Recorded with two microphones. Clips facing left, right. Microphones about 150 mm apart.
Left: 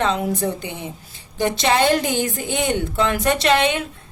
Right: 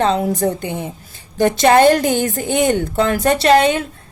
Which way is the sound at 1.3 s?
45° right (ahead or behind).